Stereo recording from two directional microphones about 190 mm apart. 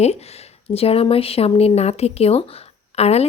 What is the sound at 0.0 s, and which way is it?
Speech, 35° left (ahead or behind).